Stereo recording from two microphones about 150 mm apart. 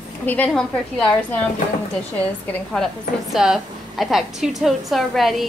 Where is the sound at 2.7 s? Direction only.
Centre (ahead or behind).